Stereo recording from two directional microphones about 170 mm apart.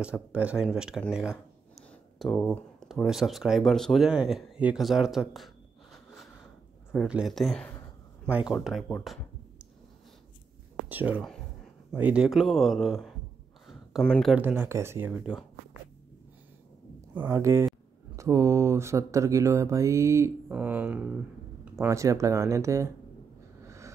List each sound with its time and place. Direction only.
0.3 s speech: 10° right (ahead or behind)
6.9 s speech: 5° right (ahead or behind)
8.3 s speech: 10° right (ahead or behind)
10.9 s speech: 10° right (ahead or behind)
13.7 s a sound: centre (ahead or behind)
14.3 s speech: 10° right (ahead or behind)
17.3 s speech: 15° right (ahead or behind)
23.6 s a sound: 15° right (ahead or behind)